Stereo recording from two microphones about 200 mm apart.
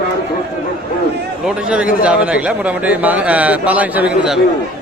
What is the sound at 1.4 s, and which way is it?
A man's voice, 5° right (ahead or behind).